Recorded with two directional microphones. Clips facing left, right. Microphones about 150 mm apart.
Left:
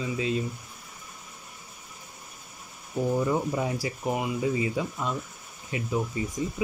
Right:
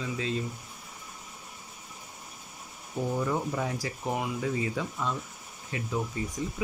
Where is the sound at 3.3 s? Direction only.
10° left (ahead or behind).